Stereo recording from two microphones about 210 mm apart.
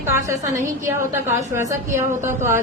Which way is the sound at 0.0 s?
15° right (ahead or behind).